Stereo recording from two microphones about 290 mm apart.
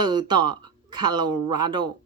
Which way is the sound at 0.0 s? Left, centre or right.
Centre.